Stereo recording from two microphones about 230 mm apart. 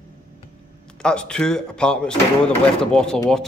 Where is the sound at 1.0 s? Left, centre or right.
Centre.